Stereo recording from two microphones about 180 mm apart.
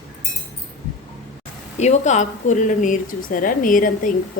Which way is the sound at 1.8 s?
40° left (ahead or behind).